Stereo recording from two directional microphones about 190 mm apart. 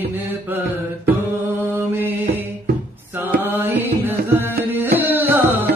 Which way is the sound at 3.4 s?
10° right (ahead or behind).